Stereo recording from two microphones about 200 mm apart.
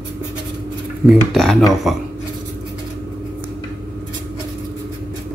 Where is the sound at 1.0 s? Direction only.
Centre (ahead or behind).